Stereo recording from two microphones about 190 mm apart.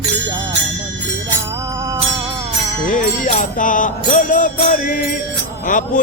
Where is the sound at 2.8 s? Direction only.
45° left (ahead or behind).